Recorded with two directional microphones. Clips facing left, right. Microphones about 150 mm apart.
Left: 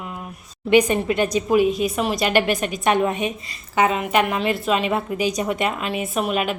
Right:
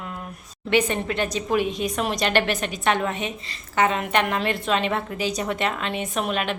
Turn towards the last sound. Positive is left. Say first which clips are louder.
# left 3 dB
turn(degrees=10)  # may be behind; listen again after turning